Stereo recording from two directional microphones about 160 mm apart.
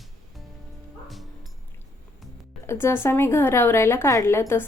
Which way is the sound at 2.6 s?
15° left (ahead or behind).